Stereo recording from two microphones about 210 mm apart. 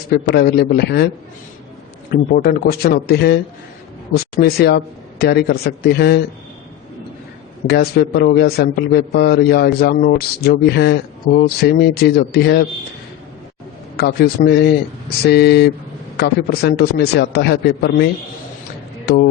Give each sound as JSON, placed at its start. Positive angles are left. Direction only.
{"t": 0.1, "sound": "a man's voice", "side_deg": 50}
{"t": 2.3, "sound": "a man's voice", "side_deg": 45}
{"t": 7.7, "sound": "a man's voice", "side_deg": 45}
{"t": 13.9, "sound": "a man's voice", "side_deg": 50}